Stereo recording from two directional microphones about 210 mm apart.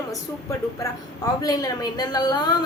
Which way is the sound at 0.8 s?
15° left (ahead or behind).